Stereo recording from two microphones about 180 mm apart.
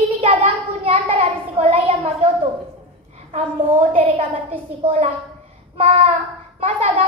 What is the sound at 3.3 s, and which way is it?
A child's voice, 35° right (ahead or behind).